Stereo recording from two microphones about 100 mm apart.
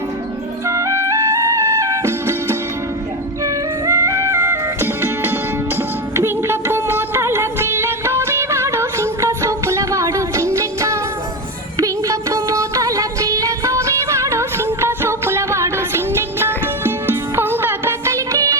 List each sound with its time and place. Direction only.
0.7 s music: 30° right (ahead or behind)